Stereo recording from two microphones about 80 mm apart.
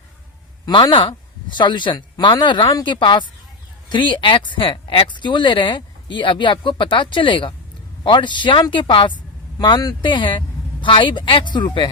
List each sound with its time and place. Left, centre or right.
0.6 s speech: left
8.0 s speech: left
9.6 s speech: left